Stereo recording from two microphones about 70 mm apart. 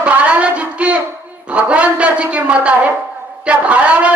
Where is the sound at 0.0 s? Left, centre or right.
Centre.